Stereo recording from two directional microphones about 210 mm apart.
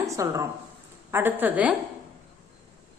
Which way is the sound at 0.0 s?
15° right (ahead or behind).